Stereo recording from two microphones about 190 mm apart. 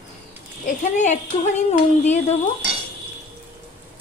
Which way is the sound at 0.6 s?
40° left (ahead or behind).